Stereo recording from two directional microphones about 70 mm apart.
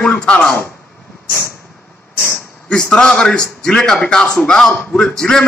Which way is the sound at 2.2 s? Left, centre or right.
Centre.